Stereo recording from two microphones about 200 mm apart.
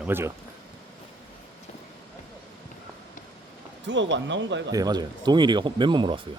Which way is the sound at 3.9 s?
65° right (ahead or behind).